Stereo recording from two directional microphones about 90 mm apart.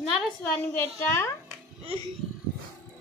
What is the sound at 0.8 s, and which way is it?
Speech, 25° left (ahead or behind).